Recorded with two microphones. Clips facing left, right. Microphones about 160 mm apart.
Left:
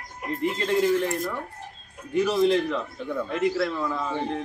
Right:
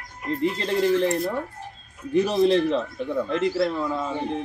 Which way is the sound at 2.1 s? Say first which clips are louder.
Right 2 dB; 35° right (ahead or behind).